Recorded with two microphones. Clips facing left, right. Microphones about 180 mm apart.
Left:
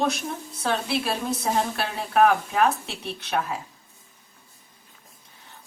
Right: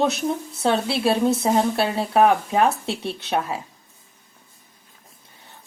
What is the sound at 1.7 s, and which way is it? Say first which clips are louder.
A woman's voice: right 3 dB; 25° right (ahead or behind).